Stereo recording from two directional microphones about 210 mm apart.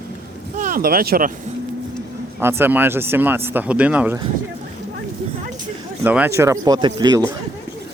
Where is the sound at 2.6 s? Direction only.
10° right (ahead or behind).